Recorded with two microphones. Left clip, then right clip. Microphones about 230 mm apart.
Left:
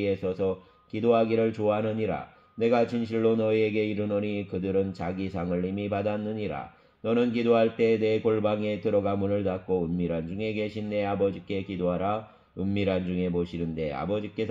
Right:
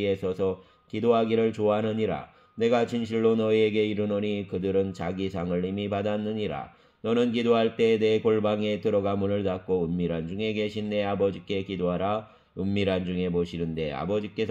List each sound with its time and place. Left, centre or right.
0.0 s speech: right